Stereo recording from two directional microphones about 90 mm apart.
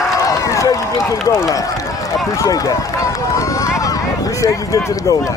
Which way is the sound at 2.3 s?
40° left (ahead or behind).